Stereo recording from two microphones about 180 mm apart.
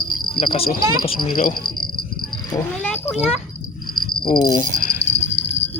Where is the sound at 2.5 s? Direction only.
10° left (ahead or behind).